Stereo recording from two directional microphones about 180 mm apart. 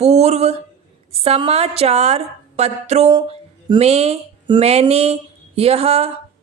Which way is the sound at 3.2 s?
30° right (ahead or behind).